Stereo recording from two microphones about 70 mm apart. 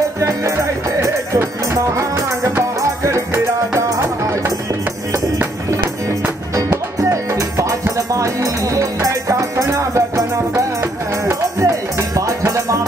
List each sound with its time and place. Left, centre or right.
0.2 s music: right
7.0 s music: right